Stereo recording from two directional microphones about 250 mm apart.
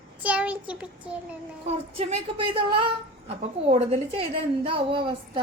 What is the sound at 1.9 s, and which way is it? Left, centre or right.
Speech, right.